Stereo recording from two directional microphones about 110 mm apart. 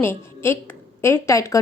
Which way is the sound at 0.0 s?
20° left (ahead or behind).